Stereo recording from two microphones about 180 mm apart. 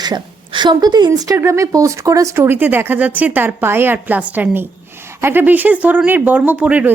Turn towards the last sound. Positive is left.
turn(degrees=-10)  # may be behind; listen again after turning